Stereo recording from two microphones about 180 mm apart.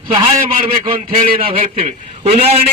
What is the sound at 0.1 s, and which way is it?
A man's voice, 30° right (ahead or behind).